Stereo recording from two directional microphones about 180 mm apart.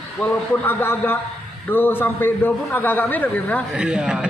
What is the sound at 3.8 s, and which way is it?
Speech, 5° right (ahead or behind).